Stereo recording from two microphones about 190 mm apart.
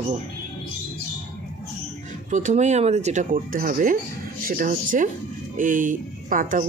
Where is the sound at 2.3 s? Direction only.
40° right (ahead or behind).